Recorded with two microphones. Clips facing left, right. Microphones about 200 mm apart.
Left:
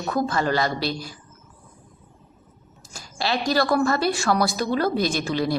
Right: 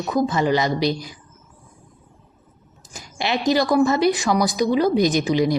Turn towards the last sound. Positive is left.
turn(degrees=-15)  # may be behind; listen again after turning